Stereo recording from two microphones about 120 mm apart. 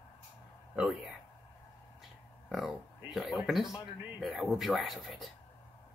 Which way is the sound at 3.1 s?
Centre (ahead or behind).